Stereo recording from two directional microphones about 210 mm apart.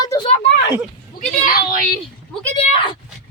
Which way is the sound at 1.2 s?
40° left (ahead or behind).